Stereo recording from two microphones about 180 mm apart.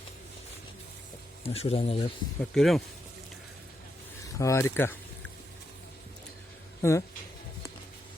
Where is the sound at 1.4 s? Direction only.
35° left (ahead or behind).